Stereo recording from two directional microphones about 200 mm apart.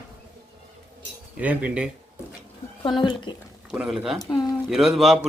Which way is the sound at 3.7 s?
5° right (ahead or behind).